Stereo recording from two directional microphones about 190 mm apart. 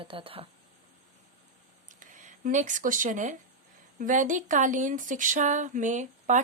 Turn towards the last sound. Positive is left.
turn(degrees=-40)  # may be behind; listen again after turning